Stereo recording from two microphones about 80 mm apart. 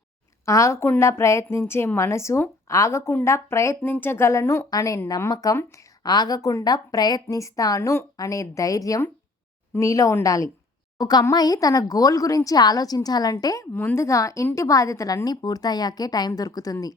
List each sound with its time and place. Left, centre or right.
0.4 s a woman's voice: left
3.8 s a woman's voice: left
7.3 s a woman's voice: left
13.7 s speech: left
14.0 s speech: left